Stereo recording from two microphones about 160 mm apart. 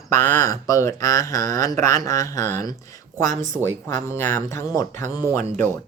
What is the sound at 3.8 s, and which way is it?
Speech, 15° left (ahead or behind).